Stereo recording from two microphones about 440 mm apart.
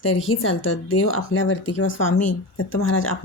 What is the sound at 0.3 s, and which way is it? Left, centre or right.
Speech, left.